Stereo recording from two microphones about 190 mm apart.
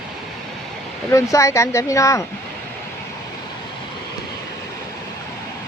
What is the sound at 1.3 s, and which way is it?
Speech, 15° left (ahead or behind).